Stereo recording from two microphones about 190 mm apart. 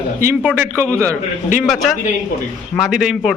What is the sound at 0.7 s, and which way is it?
A man's voice, 5° left (ahead or behind).